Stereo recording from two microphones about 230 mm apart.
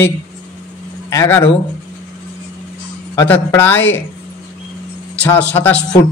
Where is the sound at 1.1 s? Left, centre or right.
Centre.